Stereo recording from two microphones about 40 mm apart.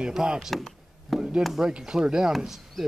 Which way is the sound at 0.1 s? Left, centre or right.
Centre.